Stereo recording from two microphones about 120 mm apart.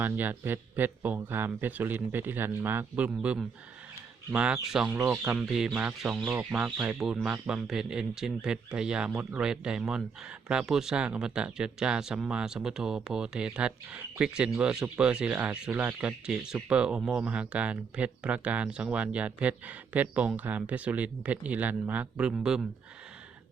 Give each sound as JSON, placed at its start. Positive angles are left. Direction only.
{"t": 0.0, "sound": "speech", "side_deg": -15}